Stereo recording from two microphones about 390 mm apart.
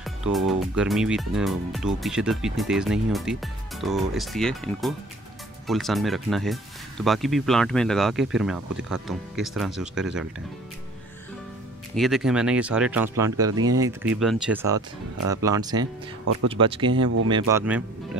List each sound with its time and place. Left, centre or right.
0.0 s speech: centre
11.9 s speech: centre
17.0 s speech: right
17.5 s speech: centre